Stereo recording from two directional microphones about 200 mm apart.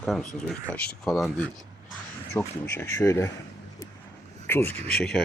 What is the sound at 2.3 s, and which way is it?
Speech, 10° left (ahead or behind).